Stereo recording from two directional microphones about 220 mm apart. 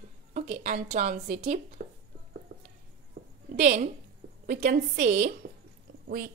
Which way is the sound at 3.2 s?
40° right (ahead or behind).